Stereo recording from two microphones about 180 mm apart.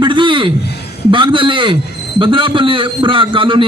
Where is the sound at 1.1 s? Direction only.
25° right (ahead or behind).